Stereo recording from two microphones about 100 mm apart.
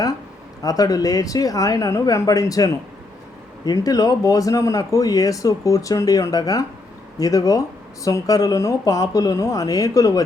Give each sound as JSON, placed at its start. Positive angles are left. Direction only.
{"t": 0.6, "sound": "speech", "side_deg": 35}